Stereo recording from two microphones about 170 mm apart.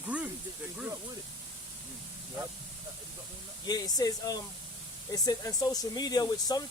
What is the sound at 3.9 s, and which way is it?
Speech, 20° left (ahead or behind).